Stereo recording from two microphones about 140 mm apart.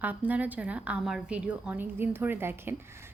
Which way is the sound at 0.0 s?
10° right (ahead or behind).